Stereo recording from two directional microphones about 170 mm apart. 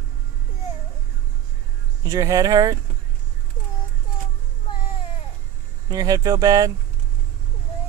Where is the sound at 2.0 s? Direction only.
20° right (ahead or behind).